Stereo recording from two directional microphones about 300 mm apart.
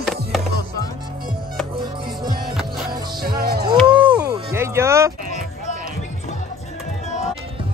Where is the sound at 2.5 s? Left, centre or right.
Centre.